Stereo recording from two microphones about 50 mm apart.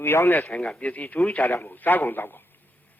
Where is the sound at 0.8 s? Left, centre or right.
Left.